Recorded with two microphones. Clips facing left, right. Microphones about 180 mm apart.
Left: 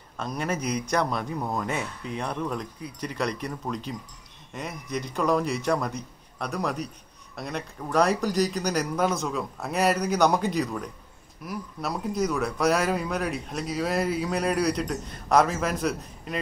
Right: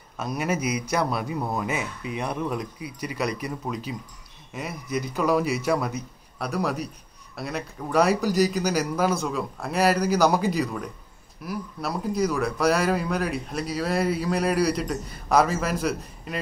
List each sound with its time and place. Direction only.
0.2 s speech: 10° right (ahead or behind)